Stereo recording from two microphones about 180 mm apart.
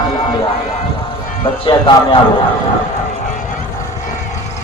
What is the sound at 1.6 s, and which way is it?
Speech, 25° left (ahead or behind).